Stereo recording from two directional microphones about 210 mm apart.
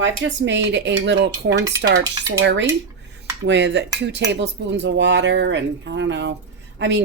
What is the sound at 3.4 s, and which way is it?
Speech, 55° right (ahead or behind).